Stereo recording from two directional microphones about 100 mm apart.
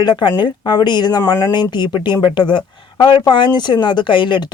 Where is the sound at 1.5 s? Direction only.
50° left (ahead or behind).